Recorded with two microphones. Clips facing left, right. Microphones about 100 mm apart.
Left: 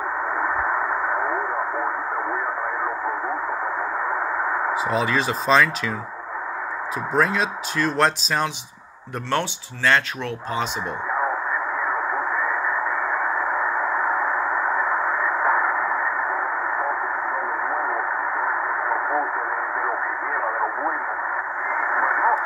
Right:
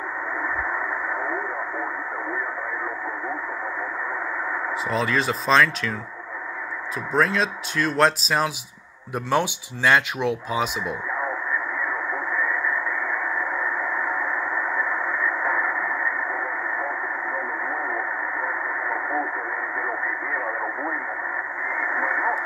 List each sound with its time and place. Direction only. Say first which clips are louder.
0.4 s radio: left 4 dB; 40° left (ahead or behind)
4.8 s speech: right 2 dB; centre (ahead or behind)
7.2 s speech: even; centre (ahead or behind)
11.8 s radio: left 4 dB; 35° left (ahead or behind)
18.4 s radio: left 4 dB; 40° left (ahead or behind)
21.7 s radio: left 4 dB; 35° left (ahead or behind)